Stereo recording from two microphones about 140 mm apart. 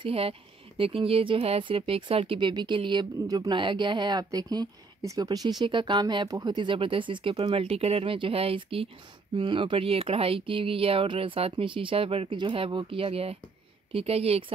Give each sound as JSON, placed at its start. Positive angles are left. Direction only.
{"t": 0.0, "sound": "a woman's voice", "side_deg": -40}